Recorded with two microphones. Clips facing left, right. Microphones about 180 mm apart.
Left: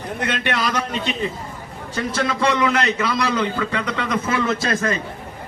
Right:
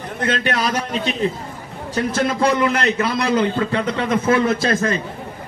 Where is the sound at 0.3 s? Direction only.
40° right (ahead or behind).